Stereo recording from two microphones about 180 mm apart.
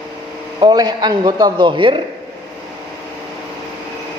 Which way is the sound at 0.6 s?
25° right (ahead or behind).